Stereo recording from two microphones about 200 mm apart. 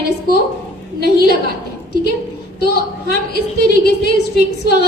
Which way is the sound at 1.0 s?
55° left (ahead or behind).